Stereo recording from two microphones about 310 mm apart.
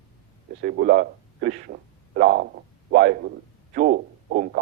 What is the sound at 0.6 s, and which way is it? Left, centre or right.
A man's voice, right.